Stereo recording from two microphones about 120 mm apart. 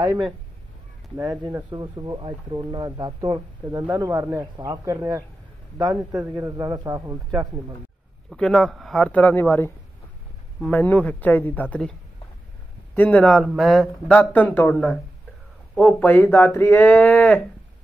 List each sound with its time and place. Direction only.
0.0 s a man's voice: 35° right (ahead or behind)
8.3 s speech: 5° left (ahead or behind)
13.4 s speech: centre (ahead or behind)